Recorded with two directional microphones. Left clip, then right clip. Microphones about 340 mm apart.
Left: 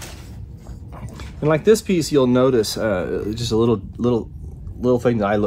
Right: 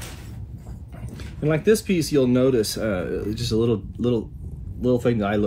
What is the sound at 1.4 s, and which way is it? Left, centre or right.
Speech, left.